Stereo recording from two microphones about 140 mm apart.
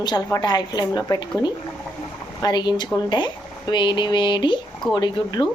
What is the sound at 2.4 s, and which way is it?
Speech, 30° left (ahead or behind).